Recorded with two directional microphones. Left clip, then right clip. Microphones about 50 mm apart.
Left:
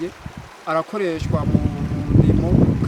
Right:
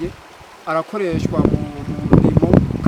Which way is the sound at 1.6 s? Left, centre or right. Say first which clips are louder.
Left 2 dB; centre.